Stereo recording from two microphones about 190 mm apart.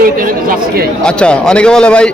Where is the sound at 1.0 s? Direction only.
5° left (ahead or behind).